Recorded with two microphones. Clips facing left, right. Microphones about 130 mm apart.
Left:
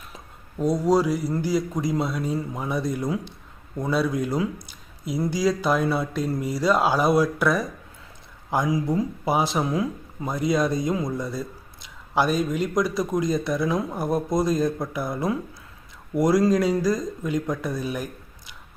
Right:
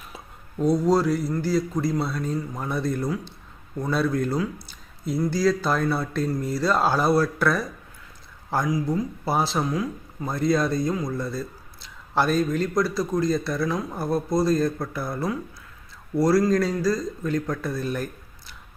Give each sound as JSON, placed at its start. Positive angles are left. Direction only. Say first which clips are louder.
{"t": 0.6, "sound": "speech", "louder": "even", "side_deg": 10}
{"t": 4.7, "sound": "a sound", "louder": "right 1 dB", "side_deg": 10}
{"t": 5.3, "sound": "speech", "louder": "left 1 dB", "side_deg": 15}
{"t": 8.7, "sound": "speech", "louder": "left 1 dB", "side_deg": 30}
{"t": 9.2, "sound": "speech", "louder": "left 1 dB", "side_deg": 15}